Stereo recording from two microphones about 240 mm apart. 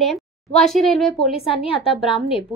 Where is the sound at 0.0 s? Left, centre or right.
Centre.